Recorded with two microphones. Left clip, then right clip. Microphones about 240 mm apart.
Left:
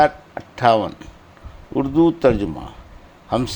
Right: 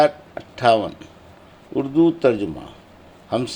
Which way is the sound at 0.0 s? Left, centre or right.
Left.